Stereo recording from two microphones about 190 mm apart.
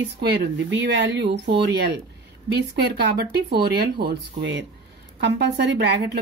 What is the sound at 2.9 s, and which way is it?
Speech, 60° right (ahead or behind).